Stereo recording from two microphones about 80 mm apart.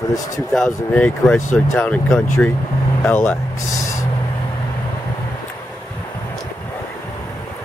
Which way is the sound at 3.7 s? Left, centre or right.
Left.